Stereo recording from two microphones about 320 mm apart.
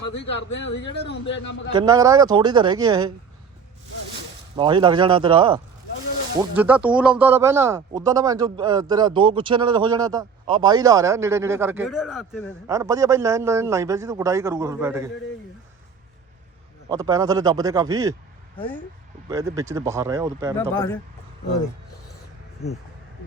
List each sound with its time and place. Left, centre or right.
0.2 s a man's voice: left
1.7 s speech: centre
4.5 s speech: centre
6.4 s speech: centre
16.9 s speech: centre
19.3 s speech: centre
20.6 s speech: centre